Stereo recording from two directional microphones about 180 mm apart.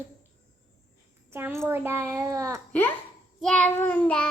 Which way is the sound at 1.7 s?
15° right (ahead or behind).